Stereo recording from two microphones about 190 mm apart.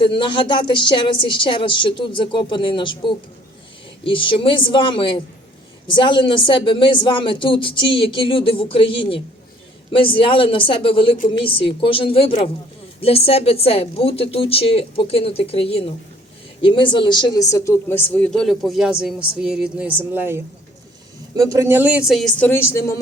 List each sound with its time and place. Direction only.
0.0 s a woman's voice: 25° left (ahead or behind)